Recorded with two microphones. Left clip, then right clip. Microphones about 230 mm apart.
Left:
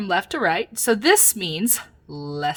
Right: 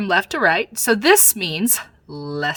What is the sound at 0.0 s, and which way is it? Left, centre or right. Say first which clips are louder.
Speech: right 4 dB; centre.